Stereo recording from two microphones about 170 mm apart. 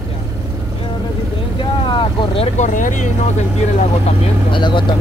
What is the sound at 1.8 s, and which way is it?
Speech, 30° left (ahead or behind).